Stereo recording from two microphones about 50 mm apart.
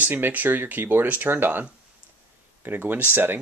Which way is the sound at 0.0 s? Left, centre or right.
Right.